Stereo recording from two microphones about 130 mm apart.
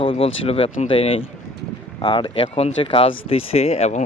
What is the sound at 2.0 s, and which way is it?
Speech, 35° left (ahead or behind).